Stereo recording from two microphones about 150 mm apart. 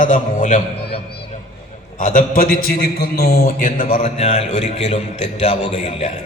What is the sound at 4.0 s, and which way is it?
A man's voice, 45° left (ahead or behind).